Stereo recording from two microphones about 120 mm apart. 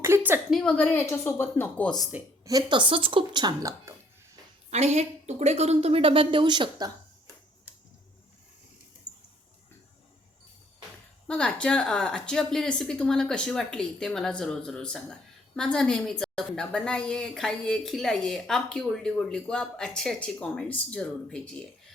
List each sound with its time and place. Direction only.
0.0 s a sound: 20° right (ahead or behind)
0.5 s speech: 10° left (ahead or behind)
0.9 s speech: 20° left (ahead or behind)
2.4 s speech: 30° right (ahead or behind)
4.7 s a woman's voice: 65° right (ahead or behind); by 6.9 s 35° right (ahead or behind)
11.3 s a woman's voice: 10° left (ahead or behind)